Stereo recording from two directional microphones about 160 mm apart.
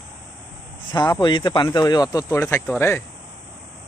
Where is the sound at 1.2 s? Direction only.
30° left (ahead or behind).